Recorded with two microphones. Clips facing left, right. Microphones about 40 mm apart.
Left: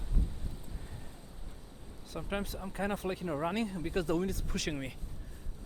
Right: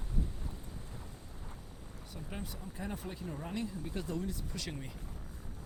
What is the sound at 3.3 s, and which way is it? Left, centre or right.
Speech, left.